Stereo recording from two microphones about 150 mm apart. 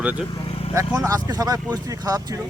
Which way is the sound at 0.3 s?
35° left (ahead or behind).